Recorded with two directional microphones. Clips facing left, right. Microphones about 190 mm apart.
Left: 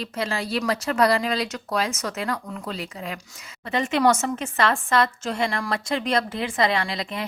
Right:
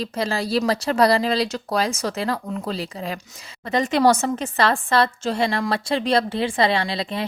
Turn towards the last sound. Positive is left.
turn(degrees=-30)  # may be behind; listen again after turning